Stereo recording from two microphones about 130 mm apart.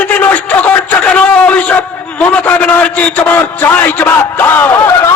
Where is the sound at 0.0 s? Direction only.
10° left (ahead or behind).